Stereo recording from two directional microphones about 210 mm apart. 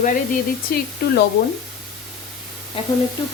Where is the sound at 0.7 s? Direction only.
45° left (ahead or behind).